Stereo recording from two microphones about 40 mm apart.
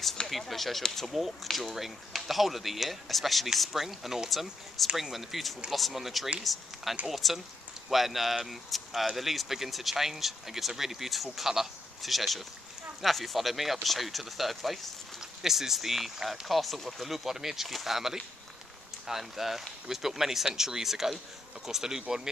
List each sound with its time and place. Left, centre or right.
0.3 s speech: centre